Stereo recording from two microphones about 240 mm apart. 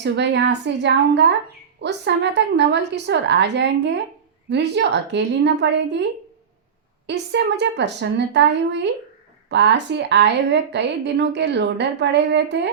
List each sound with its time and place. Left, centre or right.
0.0 s a woman's voice: right
7.1 s a woman's voice: right